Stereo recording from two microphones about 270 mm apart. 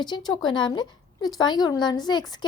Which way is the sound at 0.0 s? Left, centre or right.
Centre.